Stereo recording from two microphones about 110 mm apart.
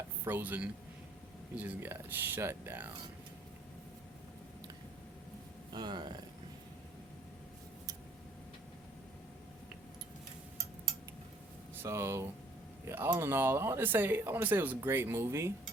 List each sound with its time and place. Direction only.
0.3 s speech: 20° right (ahead or behind)
5.7 s speech: 40° right (ahead or behind)
11.8 s speech: 25° right (ahead or behind)